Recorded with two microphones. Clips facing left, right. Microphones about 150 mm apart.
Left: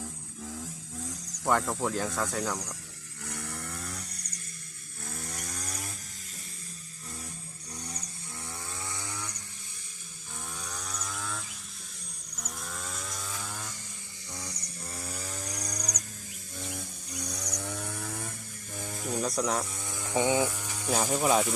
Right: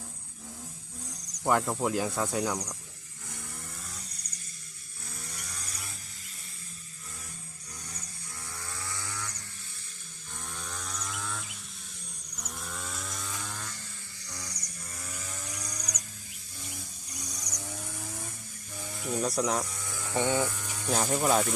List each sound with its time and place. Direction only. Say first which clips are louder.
1.5 s speech: right 1 dB; 5° right (ahead or behind)
3.2 s chainsaw: left 6 dB; 70° left (ahead or behind)
5.2 s chainsaw: left 5 dB; 50° left (ahead or behind)
8.6 s chainsaw: right 1 dB; 20° left (ahead or behind)
10.6 s chainsaw: right 1 dB; centre (ahead or behind)
14.3 s a sound: left 3 dB; 20° left (ahead or behind)
14.9 s chainsaw: left 4 dB; 35° left (ahead or behind)
16.6 s a sound: left 6 dB; 55° left (ahead or behind)
17.3 s chainsaw: left 4 dB; 65° left (ahead or behind)
18.8 s a sound: left 1 dB; 45° left (ahead or behind)
19.2 s speech: right 1 dB; centre (ahead or behind)
19.6 s electric shaver: left 1 dB; 25° left (ahead or behind)
20.1 s speech: left 2 dB; 15° left (ahead or behind)